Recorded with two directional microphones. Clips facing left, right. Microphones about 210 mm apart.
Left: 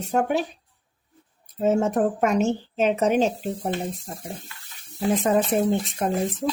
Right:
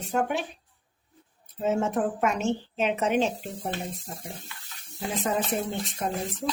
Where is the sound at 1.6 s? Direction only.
40° left (ahead or behind).